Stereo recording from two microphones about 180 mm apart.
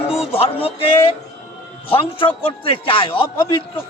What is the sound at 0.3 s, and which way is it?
A man's voice, 30° left (ahead or behind).